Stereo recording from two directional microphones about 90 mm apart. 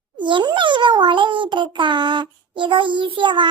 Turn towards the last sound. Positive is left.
turn(degrees=-60)  # may be behind; listen again after turning